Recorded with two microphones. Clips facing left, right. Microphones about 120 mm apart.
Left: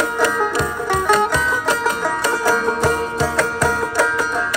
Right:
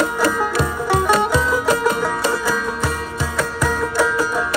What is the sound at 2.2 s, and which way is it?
Music, 45° left (ahead or behind).